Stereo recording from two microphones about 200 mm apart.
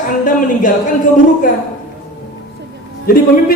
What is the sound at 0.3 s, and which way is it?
Speech, 40° left (ahead or behind).